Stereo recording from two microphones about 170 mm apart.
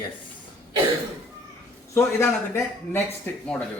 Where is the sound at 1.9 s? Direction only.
15° left (ahead or behind).